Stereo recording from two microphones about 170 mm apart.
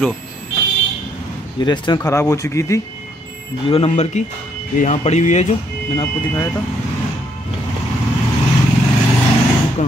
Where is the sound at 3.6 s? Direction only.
35° left (ahead or behind).